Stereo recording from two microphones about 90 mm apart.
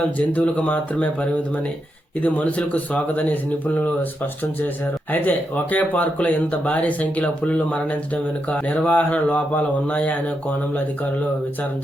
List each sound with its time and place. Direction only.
0.3 s speech: 15° left (ahead or behind)
5.7 s speech: 15° left (ahead or behind)